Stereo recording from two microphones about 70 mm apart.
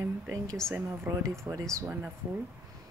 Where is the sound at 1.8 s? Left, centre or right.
Right.